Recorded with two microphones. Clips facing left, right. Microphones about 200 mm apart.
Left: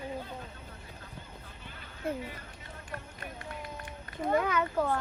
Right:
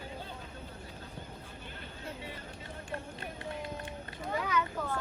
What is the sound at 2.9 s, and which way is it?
Run, 25° right (ahead or behind).